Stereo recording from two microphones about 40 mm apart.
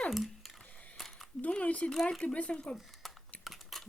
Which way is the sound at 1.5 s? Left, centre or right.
Left.